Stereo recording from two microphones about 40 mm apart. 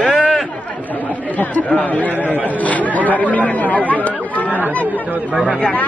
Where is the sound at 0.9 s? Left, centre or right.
Left.